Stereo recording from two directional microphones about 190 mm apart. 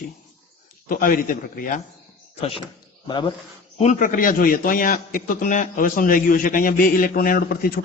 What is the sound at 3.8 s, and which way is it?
A man's voice, 40° left (ahead or behind).